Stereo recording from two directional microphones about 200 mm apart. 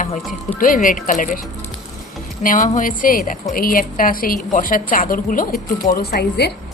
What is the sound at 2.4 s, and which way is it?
A woman's voice, 40° left (ahead or behind).